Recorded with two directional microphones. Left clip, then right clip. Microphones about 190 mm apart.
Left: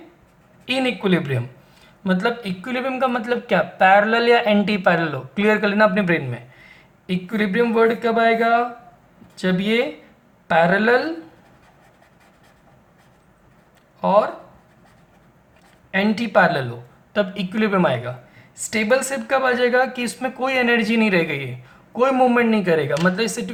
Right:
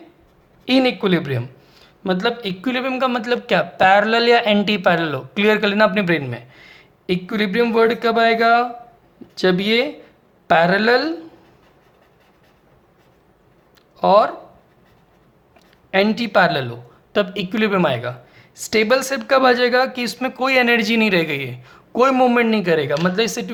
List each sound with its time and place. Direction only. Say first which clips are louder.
0.6 s speech: right 4 dB; 45° right (ahead or behind)
14.0 s speech: right 3 dB; 50° right (ahead or behind)
15.9 s speech: right 3 dB; 50° right (ahead or behind)